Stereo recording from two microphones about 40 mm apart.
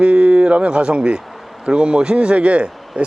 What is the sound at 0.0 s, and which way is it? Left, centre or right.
Speech, right.